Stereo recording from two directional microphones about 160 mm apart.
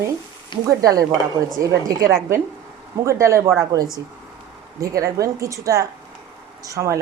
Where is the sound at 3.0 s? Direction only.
20° right (ahead or behind).